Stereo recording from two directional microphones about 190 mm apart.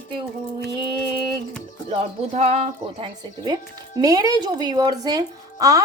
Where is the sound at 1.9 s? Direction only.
30° right (ahead or behind).